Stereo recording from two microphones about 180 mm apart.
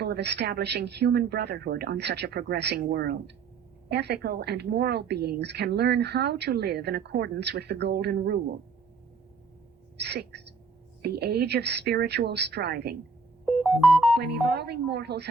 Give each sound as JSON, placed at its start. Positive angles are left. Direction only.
{"t": 0.0, "sound": "a woman's voice", "side_deg": -65}
{"t": 10.0, "sound": "a woman's voice", "side_deg": -65}
{"t": 13.4, "sound": "music", "side_deg": 0}
{"t": 14.4, "sound": "a woman's voice", "side_deg": -65}